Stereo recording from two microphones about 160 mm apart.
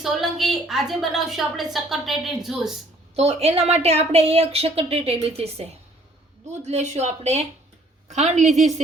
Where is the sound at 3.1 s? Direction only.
40° right (ahead or behind).